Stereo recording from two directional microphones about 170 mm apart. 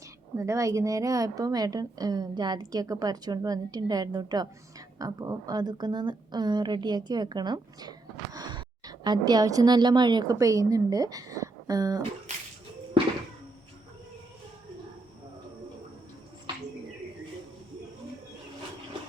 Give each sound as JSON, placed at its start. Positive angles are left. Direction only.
{"t": 0.3, "sound": "a woman's voice", "side_deg": -20}